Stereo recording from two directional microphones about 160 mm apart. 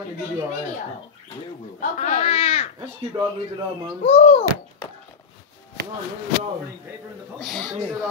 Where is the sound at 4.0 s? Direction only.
40° left (ahead or behind).